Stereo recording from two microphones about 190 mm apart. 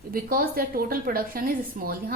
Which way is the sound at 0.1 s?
50° right (ahead or behind).